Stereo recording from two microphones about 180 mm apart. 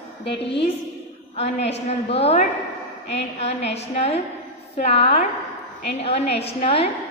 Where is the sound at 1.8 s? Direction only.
35° left (ahead or behind).